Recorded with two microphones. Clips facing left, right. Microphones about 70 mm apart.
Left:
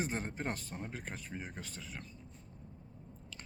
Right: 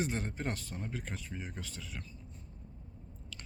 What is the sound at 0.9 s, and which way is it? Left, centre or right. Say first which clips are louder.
Speech: right 2 dB; left.